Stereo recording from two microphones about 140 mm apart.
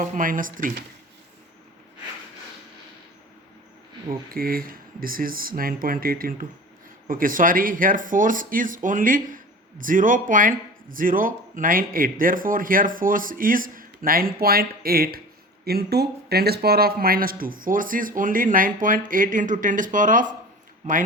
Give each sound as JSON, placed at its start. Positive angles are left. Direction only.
{"t": 0.0, "sound": "speech", "side_deg": -70}
{"t": 4.4, "sound": "a man's voice", "side_deg": -90}